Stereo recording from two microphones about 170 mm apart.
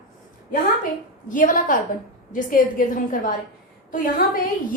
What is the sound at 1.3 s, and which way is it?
A woman's voice, 55° left (ahead or behind).